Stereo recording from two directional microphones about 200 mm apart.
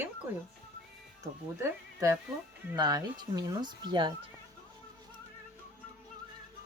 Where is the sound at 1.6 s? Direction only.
15° right (ahead or behind).